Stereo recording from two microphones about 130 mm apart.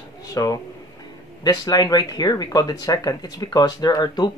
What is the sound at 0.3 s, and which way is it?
Speech, 30° left (ahead or behind).